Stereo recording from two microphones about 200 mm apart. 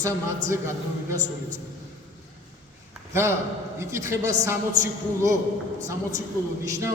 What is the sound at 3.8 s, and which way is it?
A man's voice, 15° right (ahead or behind).